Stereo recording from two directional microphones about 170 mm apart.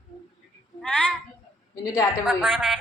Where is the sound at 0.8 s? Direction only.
5° left (ahead or behind).